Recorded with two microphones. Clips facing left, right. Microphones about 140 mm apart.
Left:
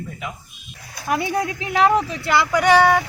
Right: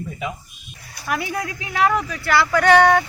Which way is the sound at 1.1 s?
25° left (ahead or behind).